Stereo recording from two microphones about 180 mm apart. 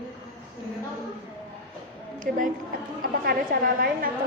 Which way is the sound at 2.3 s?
50° right (ahead or behind).